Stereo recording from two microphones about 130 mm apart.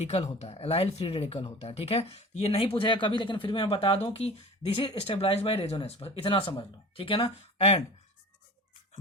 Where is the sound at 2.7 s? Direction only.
40° left (ahead or behind).